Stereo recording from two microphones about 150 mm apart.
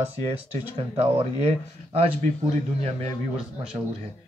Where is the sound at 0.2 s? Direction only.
40° right (ahead or behind).